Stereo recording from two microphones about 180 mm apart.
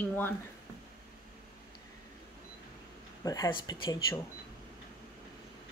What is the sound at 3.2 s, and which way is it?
Speech, 20° left (ahead or behind).